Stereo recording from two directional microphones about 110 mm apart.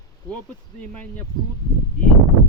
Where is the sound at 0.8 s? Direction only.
15° left (ahead or behind).